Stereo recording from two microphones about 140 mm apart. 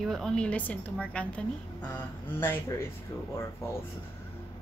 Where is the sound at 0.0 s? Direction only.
5° left (ahead or behind).